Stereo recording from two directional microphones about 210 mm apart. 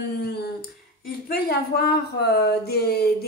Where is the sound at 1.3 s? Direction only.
50° left (ahead or behind).